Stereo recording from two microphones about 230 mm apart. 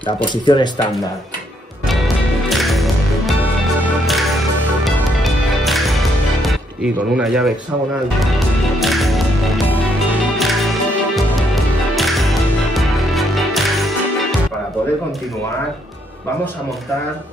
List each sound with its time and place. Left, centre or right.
0.3 s speech: centre
2.5 s music: centre
8.7 s music: centre